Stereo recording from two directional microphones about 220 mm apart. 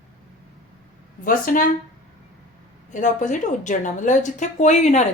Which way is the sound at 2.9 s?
35° left (ahead or behind).